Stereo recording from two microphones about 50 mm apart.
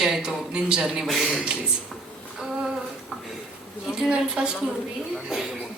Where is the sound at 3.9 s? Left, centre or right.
Centre.